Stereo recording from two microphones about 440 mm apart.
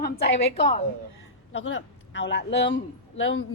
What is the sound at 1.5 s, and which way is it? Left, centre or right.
A woman's voice, left.